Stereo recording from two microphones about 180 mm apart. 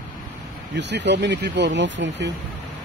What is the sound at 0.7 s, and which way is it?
Speech, 75° right (ahead or behind).